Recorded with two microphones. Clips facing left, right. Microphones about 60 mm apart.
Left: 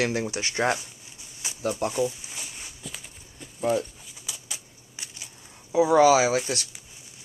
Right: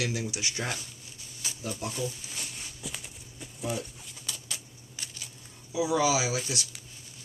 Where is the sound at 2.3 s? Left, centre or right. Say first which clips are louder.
Left 1 dB; centre.